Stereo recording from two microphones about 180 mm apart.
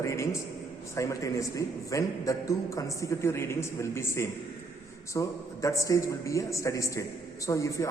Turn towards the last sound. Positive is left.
turn(degrees=15)  # may be behind; listen again after turning